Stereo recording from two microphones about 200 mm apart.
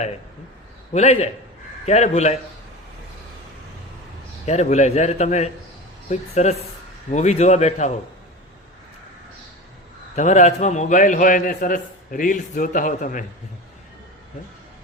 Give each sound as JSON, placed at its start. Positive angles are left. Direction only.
{"t": 0.9, "sound": "a man's voice", "side_deg": 35}
{"t": 4.4, "sound": "a man's voice", "side_deg": 35}
{"t": 10.2, "sound": "a man's voice", "side_deg": 35}